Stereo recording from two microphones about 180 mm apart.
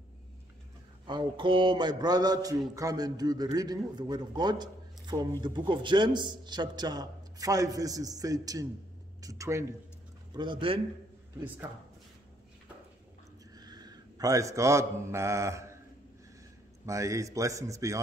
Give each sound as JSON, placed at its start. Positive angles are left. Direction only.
{"t": 1.0, "sound": "a man's voice", "side_deg": -25}
{"t": 13.6, "sound": "mantra", "side_deg": -20}
{"t": 16.8, "sound": "a man's voice", "side_deg": -15}